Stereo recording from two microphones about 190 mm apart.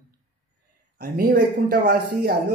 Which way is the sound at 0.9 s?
50° right (ahead or behind).